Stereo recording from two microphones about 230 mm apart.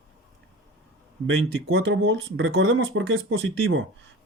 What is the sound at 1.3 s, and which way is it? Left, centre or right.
Speech, right.